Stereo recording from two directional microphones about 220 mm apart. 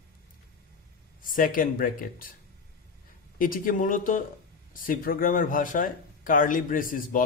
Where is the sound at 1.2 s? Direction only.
40° left (ahead or behind).